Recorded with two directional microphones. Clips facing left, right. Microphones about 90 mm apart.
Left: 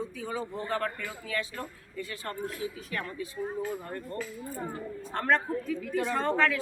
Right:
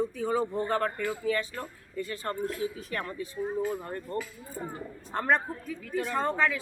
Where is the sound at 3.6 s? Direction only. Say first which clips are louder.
Right 3 dB; 25° right (ahead or behind).